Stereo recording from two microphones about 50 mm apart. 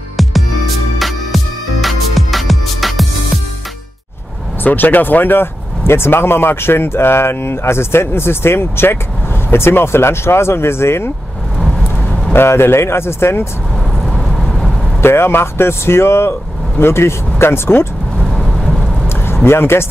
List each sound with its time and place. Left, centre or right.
0.9 s music: centre
4.6 s speech: left
12.3 s speech: left
14.1 s vehicle: centre
15.0 s speech: left
18.3 s thunder: centre
19.0 s vehicle: left